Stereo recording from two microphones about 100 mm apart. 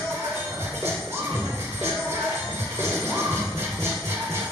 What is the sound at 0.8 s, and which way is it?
Music, 25° right (ahead or behind).